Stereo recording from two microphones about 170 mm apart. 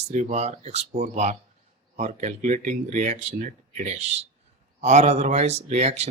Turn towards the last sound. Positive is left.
turn(degrees=-40)  # may be behind; listen again after turning